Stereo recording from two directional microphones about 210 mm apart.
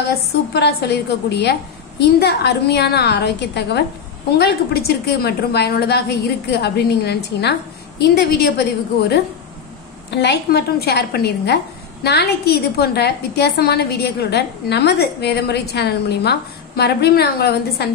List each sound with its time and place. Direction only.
0.1 s a woman's voice: 50° left (ahead or behind)
10.1 s a woman's voice: 55° left (ahead or behind)